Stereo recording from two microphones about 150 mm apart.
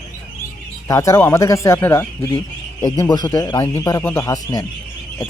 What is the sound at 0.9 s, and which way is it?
Speech, 20° left (ahead or behind).